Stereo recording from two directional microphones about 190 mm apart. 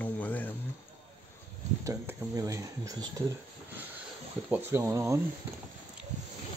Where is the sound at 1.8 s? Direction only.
15° right (ahead or behind).